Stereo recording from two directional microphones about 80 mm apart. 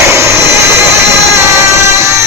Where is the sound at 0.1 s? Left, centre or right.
Right.